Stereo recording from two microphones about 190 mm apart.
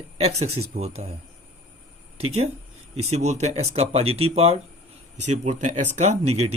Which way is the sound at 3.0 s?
35° right (ahead or behind).